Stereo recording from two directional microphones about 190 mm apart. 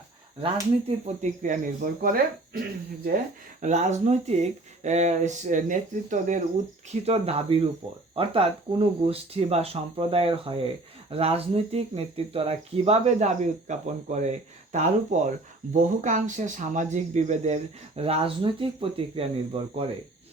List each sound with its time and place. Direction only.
0.9 s speech: 40° right (ahead or behind)
3.6 s speech: 35° right (ahead or behind)